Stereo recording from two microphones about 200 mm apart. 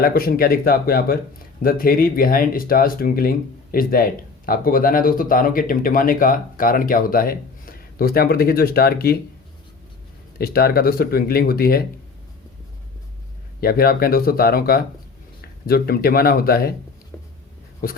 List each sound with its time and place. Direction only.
0.0 s speech: 45° left (ahead or behind)
10.3 s speech: 50° left (ahead or behind)
13.6 s speech: 50° left (ahead or behind)